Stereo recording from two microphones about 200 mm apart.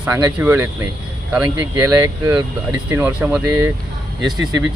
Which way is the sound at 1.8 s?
10° right (ahead or behind).